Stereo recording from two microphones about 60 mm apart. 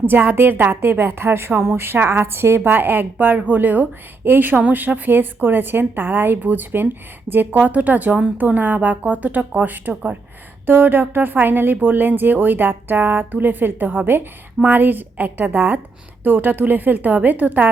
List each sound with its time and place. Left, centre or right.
0.0 s a woman's voice: right